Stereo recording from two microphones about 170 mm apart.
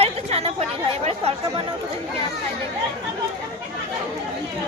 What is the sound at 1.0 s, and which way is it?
Speech, 40° right (ahead or behind).